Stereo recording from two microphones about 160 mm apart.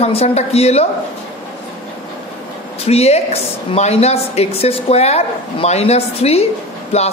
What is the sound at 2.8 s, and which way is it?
A man's voice, 40° left (ahead or behind).